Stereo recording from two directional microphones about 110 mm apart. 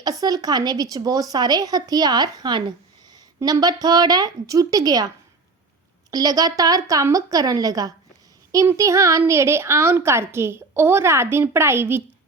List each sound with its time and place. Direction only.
0.0 s a woman's voice: 35° right (ahead or behind)